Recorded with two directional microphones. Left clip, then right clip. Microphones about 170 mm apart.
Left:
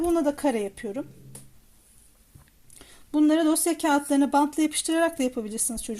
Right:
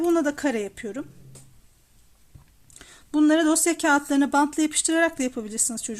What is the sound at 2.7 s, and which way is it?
A woman's voice, 15° right (ahead or behind).